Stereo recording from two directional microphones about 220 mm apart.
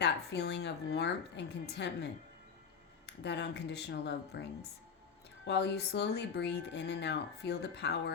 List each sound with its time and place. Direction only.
0.0 s speech: 50° left (ahead or behind)
3.2 s speech: 50° left (ahead or behind)
5.5 s speech: 50° left (ahead or behind)